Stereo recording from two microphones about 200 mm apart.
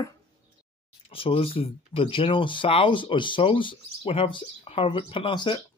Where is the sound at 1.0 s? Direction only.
30° left (ahead or behind).